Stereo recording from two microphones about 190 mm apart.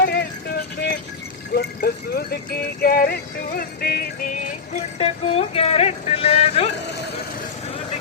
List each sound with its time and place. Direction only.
0.0 s clip-clop: 55° left (ahead or behind)
1.5 s music: 55° left (ahead or behind); by 6.7 s 35° left (ahead or behind)